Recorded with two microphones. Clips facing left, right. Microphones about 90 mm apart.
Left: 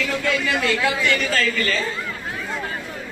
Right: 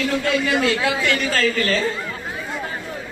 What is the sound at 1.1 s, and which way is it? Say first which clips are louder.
Speech: right 1 dB; 35° right (ahead or behind).